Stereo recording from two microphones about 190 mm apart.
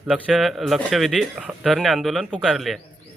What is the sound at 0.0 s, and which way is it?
Speech, 5° right (ahead or behind).